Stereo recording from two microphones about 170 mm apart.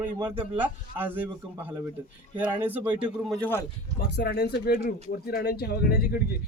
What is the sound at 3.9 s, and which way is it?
Speech, 65° left (ahead or behind).